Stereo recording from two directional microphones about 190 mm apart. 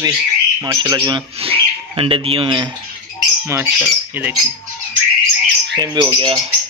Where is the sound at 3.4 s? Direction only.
10° right (ahead or behind).